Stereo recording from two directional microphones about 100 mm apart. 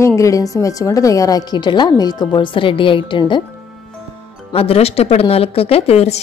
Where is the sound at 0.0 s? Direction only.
30° left (ahead or behind); by 3.4 s 50° left (ahead or behind).